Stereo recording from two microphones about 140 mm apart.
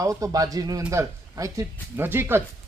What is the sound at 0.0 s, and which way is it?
Speech, 25° right (ahead or behind).